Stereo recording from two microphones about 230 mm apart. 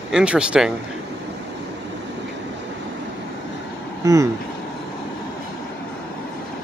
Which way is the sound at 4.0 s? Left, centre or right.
Centre.